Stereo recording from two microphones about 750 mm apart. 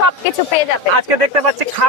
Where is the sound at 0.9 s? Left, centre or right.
Right.